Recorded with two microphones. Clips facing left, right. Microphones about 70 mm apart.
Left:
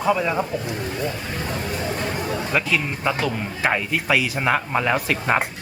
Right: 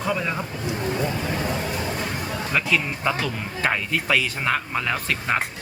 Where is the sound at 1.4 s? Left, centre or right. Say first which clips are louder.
Even; centre.